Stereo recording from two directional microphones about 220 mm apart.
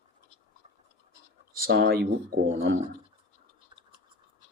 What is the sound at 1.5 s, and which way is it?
Speech, 45° right (ahead or behind).